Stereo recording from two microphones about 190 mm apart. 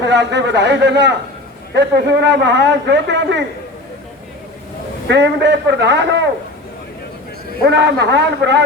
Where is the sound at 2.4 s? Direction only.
70° right (ahead or behind).